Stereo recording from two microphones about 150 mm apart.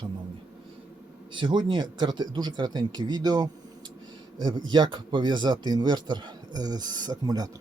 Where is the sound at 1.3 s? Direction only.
30° right (ahead or behind).